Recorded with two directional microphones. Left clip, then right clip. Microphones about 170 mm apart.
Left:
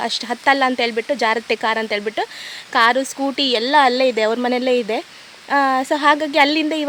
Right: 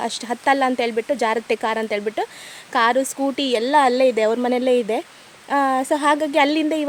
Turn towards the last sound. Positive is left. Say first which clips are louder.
# left 2 dB
turn(degrees=0)  # may be behind; listen again after turning